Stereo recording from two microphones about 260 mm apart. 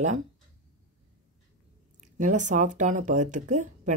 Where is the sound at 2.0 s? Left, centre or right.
Right.